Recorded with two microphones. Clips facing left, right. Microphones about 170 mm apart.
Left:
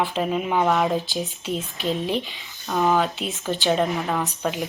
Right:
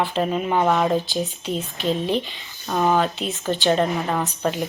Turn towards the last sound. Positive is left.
turn(degrees=0)  # may be behind; listen again after turning